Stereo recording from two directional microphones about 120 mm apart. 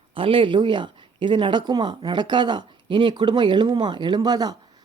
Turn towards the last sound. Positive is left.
turn(degrees=-35)  # may be behind; listen again after turning